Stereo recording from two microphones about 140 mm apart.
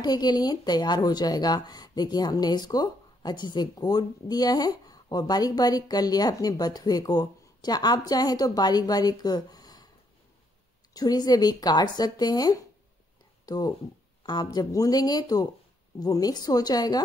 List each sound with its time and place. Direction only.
0.0 s speech: 30° left (ahead or behind)
10.9 s speech: 30° left (ahead or behind)